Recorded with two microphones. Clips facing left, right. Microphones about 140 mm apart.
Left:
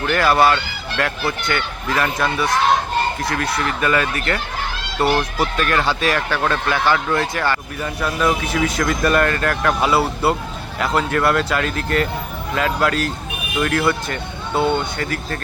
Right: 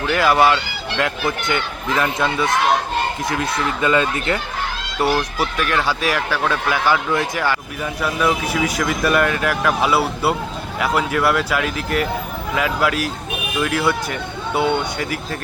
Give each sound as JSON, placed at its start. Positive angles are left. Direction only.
{"t": 0.0, "sound": "speech", "side_deg": -10}
{"t": 5.1, "sound": "speech", "side_deg": -5}